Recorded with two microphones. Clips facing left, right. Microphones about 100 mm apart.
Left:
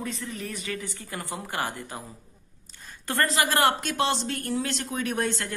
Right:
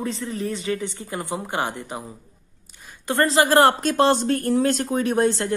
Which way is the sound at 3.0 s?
25° right (ahead or behind).